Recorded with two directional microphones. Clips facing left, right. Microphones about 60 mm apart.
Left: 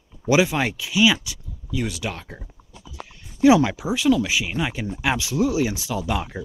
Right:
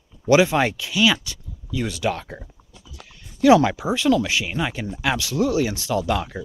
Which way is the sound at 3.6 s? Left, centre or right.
Centre.